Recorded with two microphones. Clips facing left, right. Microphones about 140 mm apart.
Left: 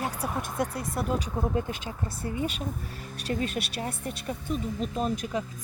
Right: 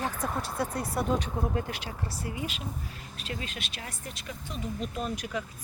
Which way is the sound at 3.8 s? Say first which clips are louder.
Left 8 dB; 55° left (ahead or behind).